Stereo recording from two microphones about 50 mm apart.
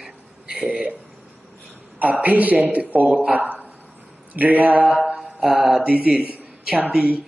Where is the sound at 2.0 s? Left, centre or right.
Right.